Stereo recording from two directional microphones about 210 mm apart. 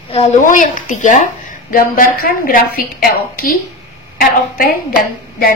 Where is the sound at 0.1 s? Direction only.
30° left (ahead or behind).